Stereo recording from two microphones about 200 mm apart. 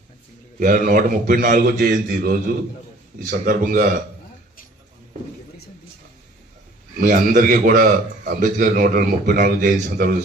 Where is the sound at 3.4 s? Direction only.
45° right (ahead or behind).